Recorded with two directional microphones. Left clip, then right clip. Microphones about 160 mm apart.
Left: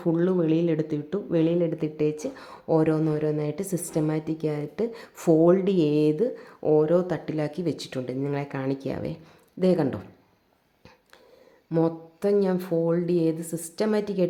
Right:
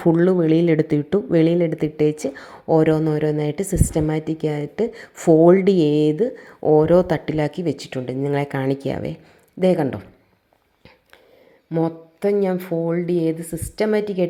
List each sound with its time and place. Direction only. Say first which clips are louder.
0.0 s speech: right 7 dB; 30° right (ahead or behind); by 5.4 s 10° right (ahead or behind)
5.4 s speech: right 7 dB; 25° right (ahead or behind)
11.7 s speech: right 2 dB; 10° right (ahead or behind)